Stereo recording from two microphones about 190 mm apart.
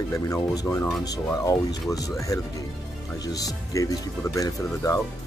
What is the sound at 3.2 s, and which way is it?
Speech, 20° left (ahead or behind).